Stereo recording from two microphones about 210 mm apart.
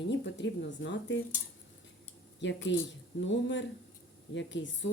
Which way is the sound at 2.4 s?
60° left (ahead or behind).